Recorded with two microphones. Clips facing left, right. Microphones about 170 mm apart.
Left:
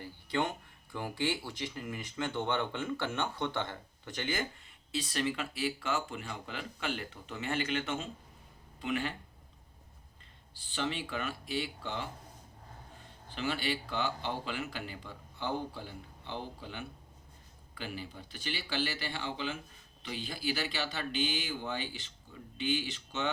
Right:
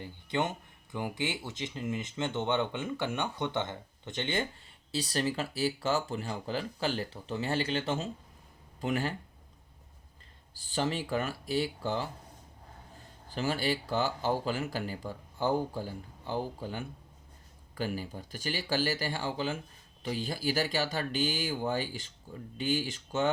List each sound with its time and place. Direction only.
0.0 s speech: 20° right (ahead or behind)
4.9 s speech: 35° right (ahead or behind)
10.6 s speech: 40° right (ahead or behind)
13.3 s speech: 40° right (ahead or behind)